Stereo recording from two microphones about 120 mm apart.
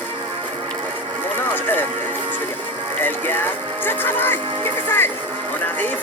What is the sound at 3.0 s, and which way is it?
Music, 15° left (ahead or behind).